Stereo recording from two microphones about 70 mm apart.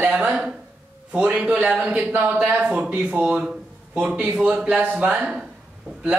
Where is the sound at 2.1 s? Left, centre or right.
Right.